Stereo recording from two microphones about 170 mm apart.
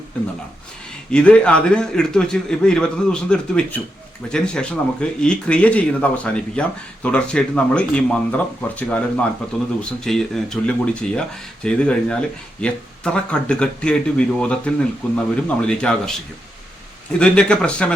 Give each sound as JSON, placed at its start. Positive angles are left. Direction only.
{"t": 1.1, "sound": "a man's voice", "side_deg": 5}
{"t": 17.2, "sound": "a man's voice", "side_deg": 5}